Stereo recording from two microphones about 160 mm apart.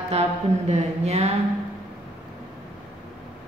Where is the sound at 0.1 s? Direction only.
40° right (ahead or behind).